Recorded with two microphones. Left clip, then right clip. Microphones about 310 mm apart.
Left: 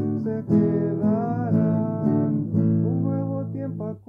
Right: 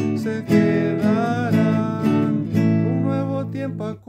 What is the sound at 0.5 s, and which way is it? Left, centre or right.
Music, right.